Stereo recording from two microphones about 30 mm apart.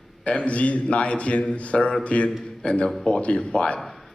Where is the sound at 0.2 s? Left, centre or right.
Left.